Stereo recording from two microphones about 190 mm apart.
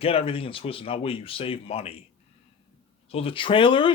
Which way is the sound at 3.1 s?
30° left (ahead or behind).